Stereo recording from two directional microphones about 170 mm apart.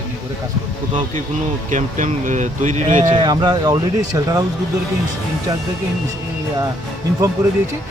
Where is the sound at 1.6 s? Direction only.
50° right (ahead or behind).